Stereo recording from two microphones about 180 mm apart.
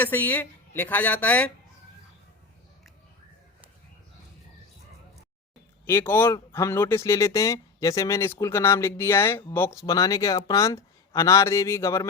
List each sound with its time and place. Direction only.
0.0 s speech: 10° left (ahead or behind)
5.8 s speech: 15° left (ahead or behind)